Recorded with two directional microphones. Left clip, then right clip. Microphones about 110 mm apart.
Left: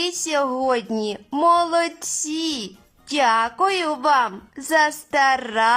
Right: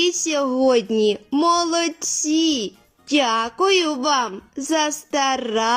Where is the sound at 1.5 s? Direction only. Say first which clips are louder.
Left 1 dB; 20° right (ahead or behind).